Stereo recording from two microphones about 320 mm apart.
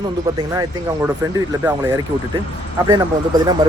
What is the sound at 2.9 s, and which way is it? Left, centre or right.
Speech, centre.